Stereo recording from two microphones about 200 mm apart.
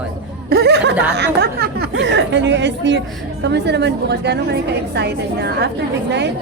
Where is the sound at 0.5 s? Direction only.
55° right (ahead or behind).